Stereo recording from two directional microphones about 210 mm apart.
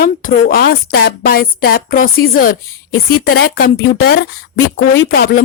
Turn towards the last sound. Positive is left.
turn(degrees=50)  # may be behind; listen again after turning